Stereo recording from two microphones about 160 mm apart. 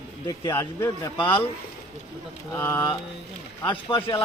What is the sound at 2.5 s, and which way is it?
Speech, 10° left (ahead or behind).